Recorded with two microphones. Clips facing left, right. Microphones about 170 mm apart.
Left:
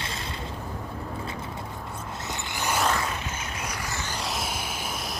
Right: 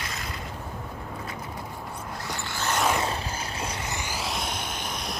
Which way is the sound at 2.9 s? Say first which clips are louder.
Right 2 dB; 25° right (ahead or behind).